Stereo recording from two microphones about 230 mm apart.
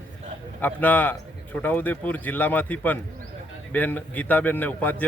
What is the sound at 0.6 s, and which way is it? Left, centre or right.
Speech, centre.